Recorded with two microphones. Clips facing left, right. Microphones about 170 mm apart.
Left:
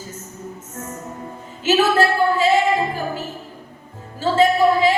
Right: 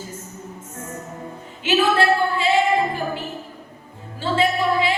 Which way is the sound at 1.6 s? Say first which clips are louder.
Left 2 dB; 40° left (ahead or behind).